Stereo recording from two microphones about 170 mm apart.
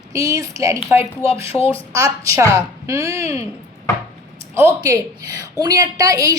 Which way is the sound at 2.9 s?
15° right (ahead or behind).